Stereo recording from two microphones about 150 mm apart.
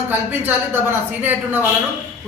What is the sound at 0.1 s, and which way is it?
Speech, 15° right (ahead or behind).